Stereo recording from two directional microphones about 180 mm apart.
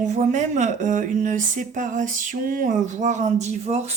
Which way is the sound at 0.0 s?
45° right (ahead or behind).